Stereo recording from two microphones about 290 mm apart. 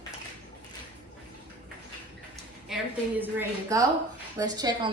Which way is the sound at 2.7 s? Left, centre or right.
Centre.